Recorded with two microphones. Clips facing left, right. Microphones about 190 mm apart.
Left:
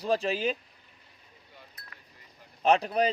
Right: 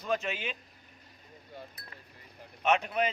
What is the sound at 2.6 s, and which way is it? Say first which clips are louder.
Speech: left 4 dB; 35° left (ahead or behind).